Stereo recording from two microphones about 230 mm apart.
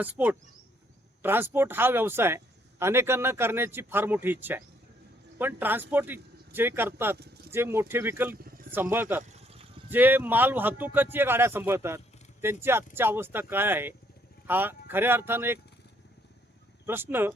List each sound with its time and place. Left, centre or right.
0.0 s speech: centre
7.2 s a sound: right
7.5 s speech: centre
8.4 s vehicle: right
8.7 s speech: centre
9.3 s vehicle: right
9.9 s speech: centre
16.8 s speech: centre